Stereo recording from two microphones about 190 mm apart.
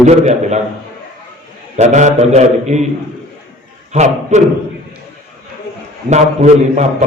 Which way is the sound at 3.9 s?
35° right (ahead or behind).